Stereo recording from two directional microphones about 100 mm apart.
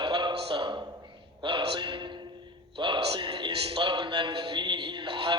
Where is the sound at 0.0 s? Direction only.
50° right (ahead or behind).